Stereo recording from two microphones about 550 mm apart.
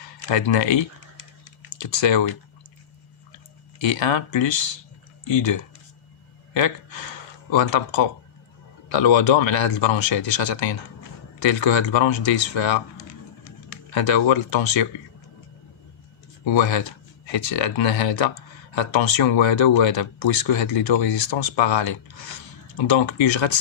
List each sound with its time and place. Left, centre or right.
0.3 s speech: left
3.8 s speech: left
6.5 s speech: left
13.9 s speech: left
16.5 s speech: left